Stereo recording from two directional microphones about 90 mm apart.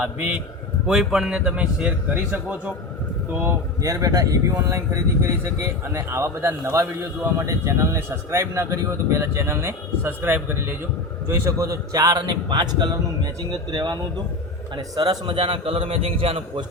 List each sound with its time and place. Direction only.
0.0 s speech: 15° right (ahead or behind)
0.9 s speech: 5° right (ahead or behind)
3.8 s a man's voice: 40° right (ahead or behind); by 10.8 s 20° right (ahead or behind)
11.3 s a man's voice: 35° right (ahead or behind)
15.4 s a man's voice: 80° right